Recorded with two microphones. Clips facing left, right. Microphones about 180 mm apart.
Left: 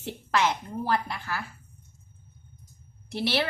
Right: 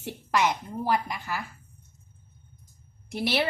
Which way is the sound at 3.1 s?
15° right (ahead or behind).